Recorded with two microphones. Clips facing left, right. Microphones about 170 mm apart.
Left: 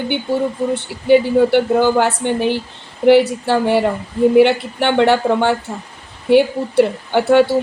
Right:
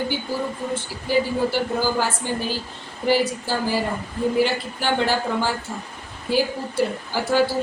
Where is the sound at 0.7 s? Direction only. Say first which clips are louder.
Left 12 dB; 65° left (ahead or behind).